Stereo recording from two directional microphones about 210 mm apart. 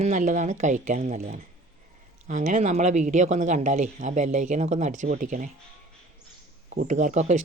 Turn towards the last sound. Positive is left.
turn(degrees=-35)  # may be behind; listen again after turning